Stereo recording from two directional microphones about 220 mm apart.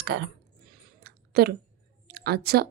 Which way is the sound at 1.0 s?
45° right (ahead or behind).